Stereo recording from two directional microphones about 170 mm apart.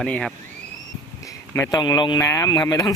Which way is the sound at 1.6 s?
20° left (ahead or behind).